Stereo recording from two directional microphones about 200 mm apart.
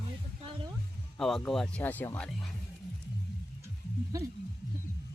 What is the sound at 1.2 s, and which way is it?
Speech, centre (ahead or behind).